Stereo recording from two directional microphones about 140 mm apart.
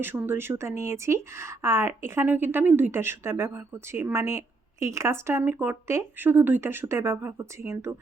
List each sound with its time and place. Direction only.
0.0 s speech: 15° right (ahead or behind)